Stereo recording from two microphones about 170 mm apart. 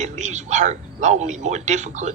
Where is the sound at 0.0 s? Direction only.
45° right (ahead or behind).